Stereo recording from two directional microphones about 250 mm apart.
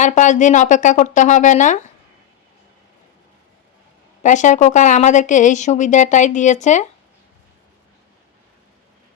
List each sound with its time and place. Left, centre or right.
0.0 s speech: left
4.2 s speech: left